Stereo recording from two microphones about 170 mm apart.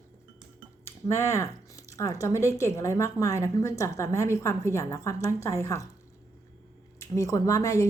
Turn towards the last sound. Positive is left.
turn(degrees=20)  # may be behind; listen again after turning